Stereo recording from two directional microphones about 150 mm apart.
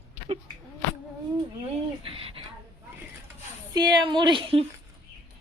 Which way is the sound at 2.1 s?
40° right (ahead or behind).